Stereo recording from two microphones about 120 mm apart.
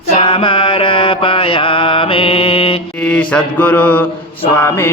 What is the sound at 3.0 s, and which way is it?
Mantra, 10° left (ahead or behind).